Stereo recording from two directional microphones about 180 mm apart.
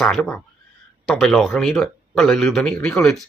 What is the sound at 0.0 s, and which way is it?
Speech, 5° left (ahead or behind).